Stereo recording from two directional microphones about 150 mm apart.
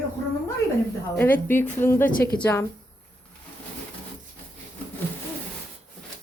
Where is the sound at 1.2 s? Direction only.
15° left (ahead or behind).